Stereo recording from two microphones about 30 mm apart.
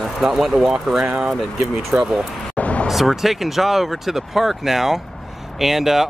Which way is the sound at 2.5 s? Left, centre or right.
Left.